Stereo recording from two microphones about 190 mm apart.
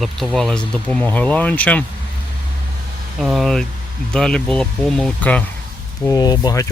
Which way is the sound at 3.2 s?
Centre (ahead or behind).